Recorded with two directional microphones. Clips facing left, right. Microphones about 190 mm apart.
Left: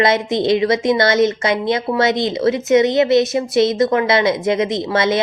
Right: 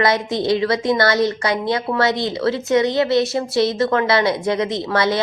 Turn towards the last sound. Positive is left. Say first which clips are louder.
# left 2 dB
turn(degrees=20)  # may be behind; listen again after turning